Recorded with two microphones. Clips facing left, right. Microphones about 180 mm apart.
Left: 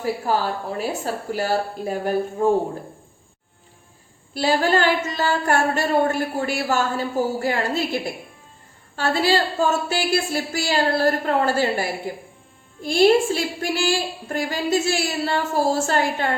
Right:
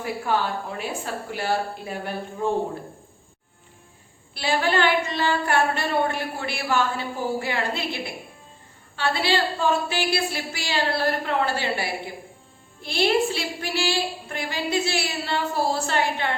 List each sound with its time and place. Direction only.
0.0 s speech: 40° left (ahead or behind)
4.4 s speech: 40° left (ahead or behind)